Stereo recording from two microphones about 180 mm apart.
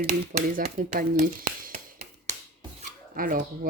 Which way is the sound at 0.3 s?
50° right (ahead or behind).